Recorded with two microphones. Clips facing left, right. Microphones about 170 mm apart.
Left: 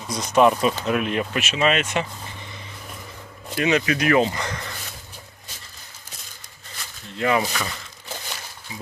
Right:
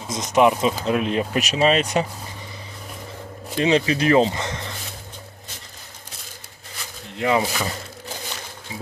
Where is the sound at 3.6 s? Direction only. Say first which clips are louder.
Right 2 dB; 30° right (ahead or behind).